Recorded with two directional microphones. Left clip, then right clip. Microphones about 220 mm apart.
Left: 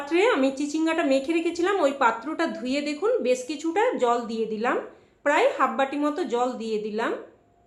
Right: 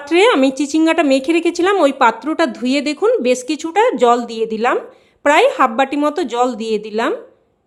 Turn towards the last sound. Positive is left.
turn(degrees=-50)  # may be behind; listen again after turning